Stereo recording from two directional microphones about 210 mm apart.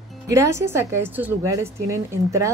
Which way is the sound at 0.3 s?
15° right (ahead or behind).